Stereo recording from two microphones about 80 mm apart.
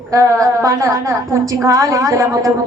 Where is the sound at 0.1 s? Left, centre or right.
Right.